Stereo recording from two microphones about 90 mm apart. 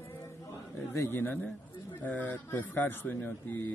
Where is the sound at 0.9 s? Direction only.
30° left (ahead or behind).